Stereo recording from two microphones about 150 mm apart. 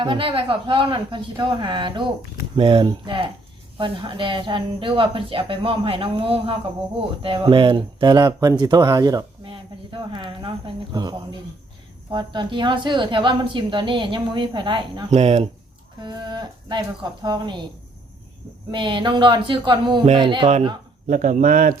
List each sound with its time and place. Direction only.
0.0 s a woman's voice: 35° right (ahead or behind)
15.1 s speech: 45° right (ahead or behind)
16.0 s speech: 30° right (ahead or behind)
18.7 s a woman's voice: 30° right (ahead or behind)
21.1 s speech: 55° right (ahead or behind)